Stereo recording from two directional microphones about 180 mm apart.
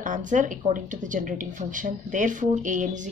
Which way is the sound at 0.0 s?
45° right (ahead or behind).